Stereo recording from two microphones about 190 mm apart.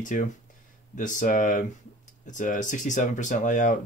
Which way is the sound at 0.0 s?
40° left (ahead or behind).